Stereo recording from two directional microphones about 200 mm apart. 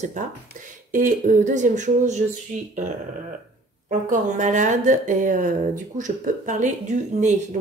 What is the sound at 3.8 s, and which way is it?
Speech, 40° right (ahead or behind).